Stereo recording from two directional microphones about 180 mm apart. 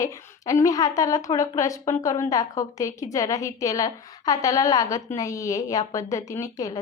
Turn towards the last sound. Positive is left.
turn(degrees=20)  # may be behind; listen again after turning